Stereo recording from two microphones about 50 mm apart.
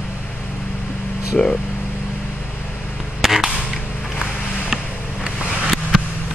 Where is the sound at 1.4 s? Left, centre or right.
Centre.